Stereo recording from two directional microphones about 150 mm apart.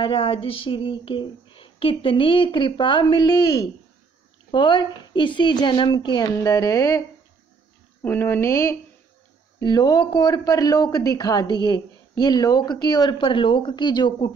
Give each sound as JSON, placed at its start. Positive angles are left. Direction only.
{"t": 0.0, "sound": "a sound", "side_deg": 40}
{"t": 4.5, "sound": "speech", "side_deg": 30}
{"t": 8.0, "sound": "speech", "side_deg": 15}